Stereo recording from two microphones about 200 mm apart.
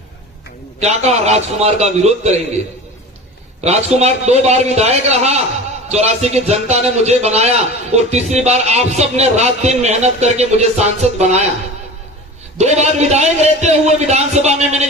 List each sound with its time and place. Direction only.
0.8 s a man's voice: 35° right (ahead or behind)
3.6 s a man's voice: 35° right (ahead or behind)
12.5 s a man's voice: 35° right (ahead or behind)